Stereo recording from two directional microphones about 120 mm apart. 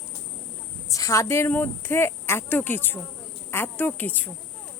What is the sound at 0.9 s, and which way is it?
A woman's voice, 25° left (ahead or behind).